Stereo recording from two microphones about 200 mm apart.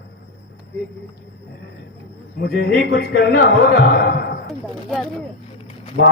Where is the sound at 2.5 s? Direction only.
55° left (ahead or behind).